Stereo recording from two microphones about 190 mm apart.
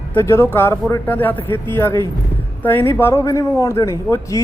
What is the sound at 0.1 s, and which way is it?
Speech, 10° left (ahead or behind).